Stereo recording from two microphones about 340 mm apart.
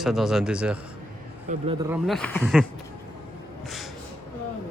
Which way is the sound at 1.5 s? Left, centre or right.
Right.